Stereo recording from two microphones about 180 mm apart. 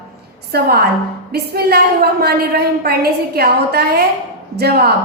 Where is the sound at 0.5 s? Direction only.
60° right (ahead or behind).